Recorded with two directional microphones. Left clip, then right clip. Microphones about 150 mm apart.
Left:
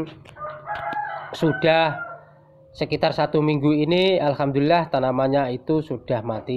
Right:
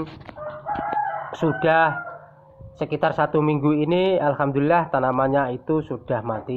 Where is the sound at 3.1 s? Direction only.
20° left (ahead or behind).